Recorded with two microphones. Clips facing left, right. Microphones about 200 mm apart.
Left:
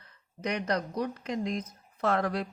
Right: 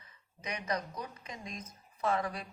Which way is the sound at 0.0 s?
65° left (ahead or behind).